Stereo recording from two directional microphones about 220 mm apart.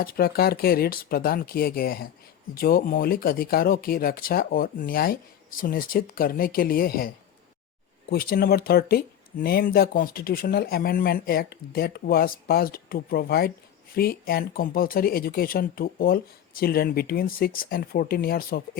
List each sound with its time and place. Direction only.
0.0 s speech: 45° left (ahead or behind)
8.1 s speech: 45° left (ahead or behind)